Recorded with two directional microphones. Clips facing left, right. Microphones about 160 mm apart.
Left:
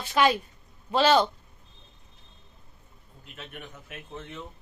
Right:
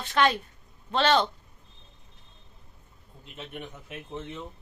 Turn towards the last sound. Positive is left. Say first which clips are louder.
# right 3 dB
turn(degrees=-20)  # may be behind; listen again after turning